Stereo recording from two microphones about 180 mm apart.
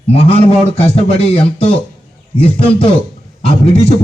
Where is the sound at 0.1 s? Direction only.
35° left (ahead or behind).